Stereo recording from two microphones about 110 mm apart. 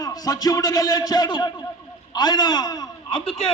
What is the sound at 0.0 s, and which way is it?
A man's voice, 35° left (ahead or behind).